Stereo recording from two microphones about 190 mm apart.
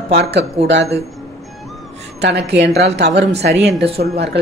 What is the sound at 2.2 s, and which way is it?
Speech, 65° right (ahead or behind).